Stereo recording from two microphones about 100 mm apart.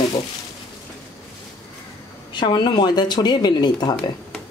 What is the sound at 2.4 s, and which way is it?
Speech, 50° left (ahead or behind).